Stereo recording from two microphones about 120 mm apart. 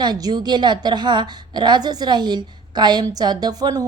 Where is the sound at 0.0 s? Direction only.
35° right (ahead or behind).